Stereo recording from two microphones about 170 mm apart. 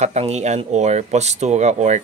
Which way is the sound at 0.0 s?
40° right (ahead or behind).